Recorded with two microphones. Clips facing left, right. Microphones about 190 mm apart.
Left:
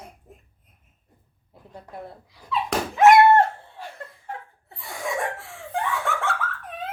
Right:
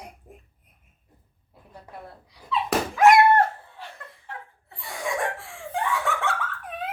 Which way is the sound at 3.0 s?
25° left (ahead or behind).